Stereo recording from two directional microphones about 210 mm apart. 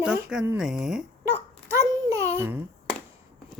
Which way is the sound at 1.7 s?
15° right (ahead or behind).